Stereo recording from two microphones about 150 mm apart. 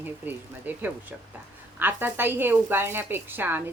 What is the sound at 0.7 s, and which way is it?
Speech, 10° right (ahead or behind).